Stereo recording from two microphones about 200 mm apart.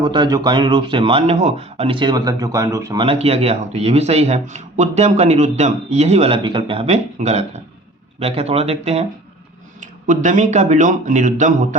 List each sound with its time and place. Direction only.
0.0 s speech: 20° right (ahead or behind); by 11.8 s 40° right (ahead or behind)